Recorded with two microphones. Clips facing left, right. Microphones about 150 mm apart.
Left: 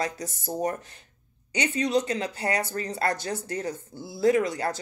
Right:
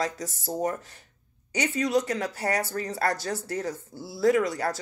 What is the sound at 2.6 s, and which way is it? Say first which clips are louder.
Speech: even; 20° left (ahead or behind).